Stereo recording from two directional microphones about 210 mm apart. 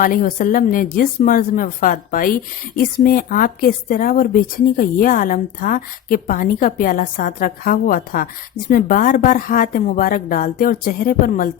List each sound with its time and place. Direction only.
0.0 s speech: 40° left (ahead or behind)